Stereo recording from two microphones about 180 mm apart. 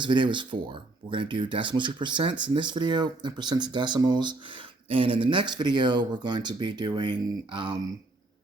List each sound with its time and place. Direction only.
0.0 s speech: 25° right (ahead or behind)